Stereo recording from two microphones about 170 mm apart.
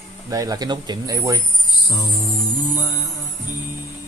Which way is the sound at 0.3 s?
20° right (ahead or behind).